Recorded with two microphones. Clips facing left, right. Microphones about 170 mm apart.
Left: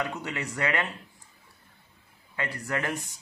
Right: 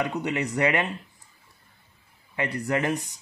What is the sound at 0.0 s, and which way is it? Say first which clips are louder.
Speech: right 6 dB; 15° right (ahead or behind).